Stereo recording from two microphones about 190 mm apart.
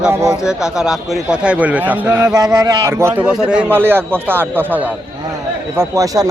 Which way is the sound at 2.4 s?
20° right (ahead or behind).